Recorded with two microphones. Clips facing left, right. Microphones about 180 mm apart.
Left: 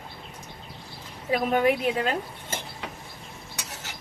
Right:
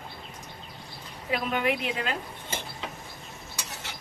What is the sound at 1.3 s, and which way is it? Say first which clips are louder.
Speech: left 5 dB; 35° left (ahead or behind).